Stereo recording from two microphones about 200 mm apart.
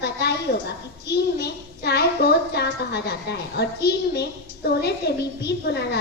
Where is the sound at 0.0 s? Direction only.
55° left (ahead or behind).